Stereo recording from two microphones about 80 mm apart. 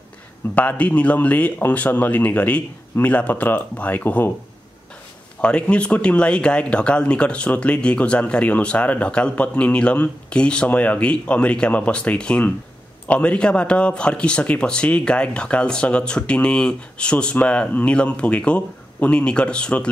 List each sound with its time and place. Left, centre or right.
0.6 s speech: centre
5.4 s speech: centre